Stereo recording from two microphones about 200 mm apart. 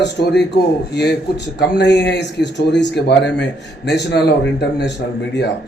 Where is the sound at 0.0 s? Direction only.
60° left (ahead or behind).